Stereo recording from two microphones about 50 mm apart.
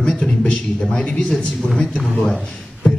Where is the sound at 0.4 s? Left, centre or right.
Centre.